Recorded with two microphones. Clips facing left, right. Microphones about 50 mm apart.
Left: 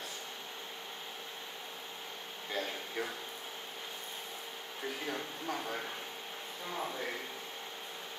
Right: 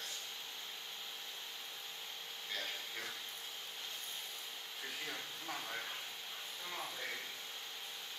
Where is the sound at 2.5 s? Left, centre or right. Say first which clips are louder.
Left 7 dB; left.